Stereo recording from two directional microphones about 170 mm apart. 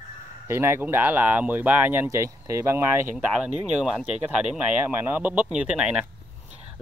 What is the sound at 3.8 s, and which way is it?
Speech, 5° right (ahead or behind).